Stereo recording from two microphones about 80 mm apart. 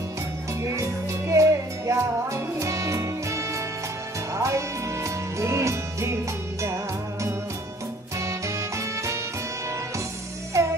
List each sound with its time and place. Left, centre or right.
1.3 s music: right
8.2 s music: right
10.5 s music: right